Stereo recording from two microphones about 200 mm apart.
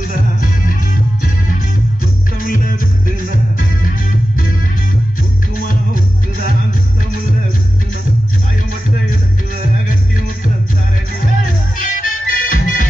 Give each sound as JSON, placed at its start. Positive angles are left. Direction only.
{"t": 2.4, "sound": "music", "side_deg": 45}
{"t": 11.8, "sound": "music", "side_deg": 40}